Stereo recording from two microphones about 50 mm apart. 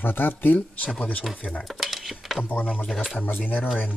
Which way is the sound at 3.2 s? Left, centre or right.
Left.